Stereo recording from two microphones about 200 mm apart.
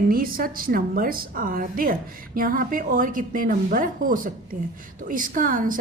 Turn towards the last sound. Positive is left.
turn(degrees=-45)  # may be behind; listen again after turning